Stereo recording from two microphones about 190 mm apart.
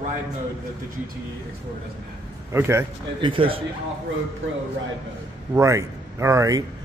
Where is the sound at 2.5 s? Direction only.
15° right (ahead or behind).